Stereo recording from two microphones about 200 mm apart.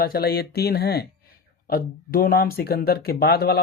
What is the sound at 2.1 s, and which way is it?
Speech, 50° left (ahead or behind).